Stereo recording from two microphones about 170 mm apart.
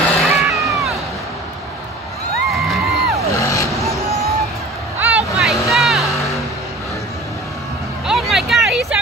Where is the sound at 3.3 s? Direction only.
20° left (ahead or behind).